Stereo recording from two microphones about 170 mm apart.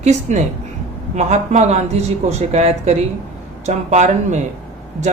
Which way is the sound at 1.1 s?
45° right (ahead or behind).